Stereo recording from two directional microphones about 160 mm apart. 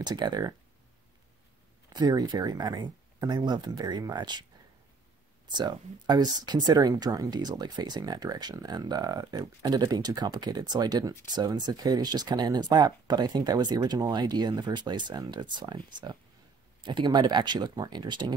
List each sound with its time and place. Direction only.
0.0 s speech: 25° right (ahead or behind)
1.9 s speech: 25° right (ahead or behind)
5.5 s speech: 25° right (ahead or behind)